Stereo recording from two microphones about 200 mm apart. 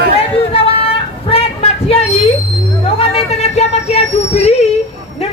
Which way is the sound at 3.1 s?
35° left (ahead or behind).